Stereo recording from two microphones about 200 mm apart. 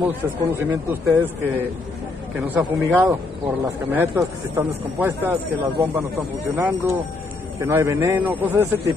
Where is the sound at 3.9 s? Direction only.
10° right (ahead or behind).